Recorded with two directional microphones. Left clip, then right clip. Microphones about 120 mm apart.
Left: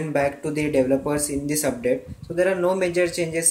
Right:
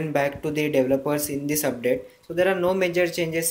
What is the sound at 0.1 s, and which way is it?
Speech, 15° right (ahead or behind).